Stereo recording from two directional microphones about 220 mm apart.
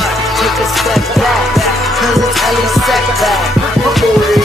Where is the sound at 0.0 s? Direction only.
Centre (ahead or behind).